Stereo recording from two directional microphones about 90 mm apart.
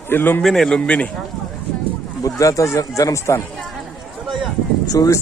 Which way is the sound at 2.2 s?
35° left (ahead or behind).